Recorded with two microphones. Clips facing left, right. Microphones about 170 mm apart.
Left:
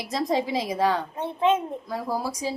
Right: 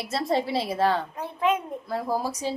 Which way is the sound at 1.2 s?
25° left (ahead or behind).